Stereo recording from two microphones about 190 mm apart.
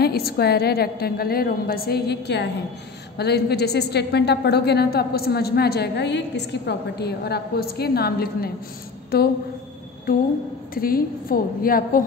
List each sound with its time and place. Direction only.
0.0 s a woman's voice: 55° left (ahead or behind)
10.1 s a woman's voice: 50° left (ahead or behind)